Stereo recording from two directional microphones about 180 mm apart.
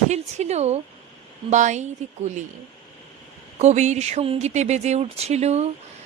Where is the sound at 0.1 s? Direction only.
40° right (ahead or behind).